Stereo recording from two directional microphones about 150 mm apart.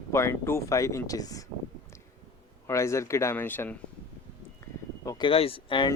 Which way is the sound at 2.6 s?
20° left (ahead or behind).